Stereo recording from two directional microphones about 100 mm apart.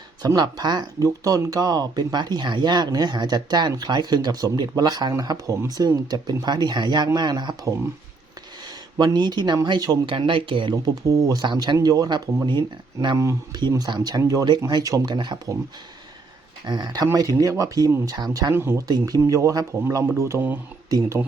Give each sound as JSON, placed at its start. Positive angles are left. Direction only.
{"t": 0.2, "sound": "speech", "side_deg": -40}
{"t": 9.0, "sound": "speech", "side_deg": -45}
{"t": 10.1, "sound": "speech", "side_deg": -60}
{"t": 11.1, "sound": "speech", "side_deg": -40}
{"t": 13.1, "sound": "speech", "side_deg": -30}
{"t": 13.6, "sound": "speech", "side_deg": -45}
{"t": 16.6, "sound": "speech", "side_deg": -45}
{"t": 18.5, "sound": "speech", "side_deg": -25}
{"t": 18.9, "sound": "speech", "side_deg": -40}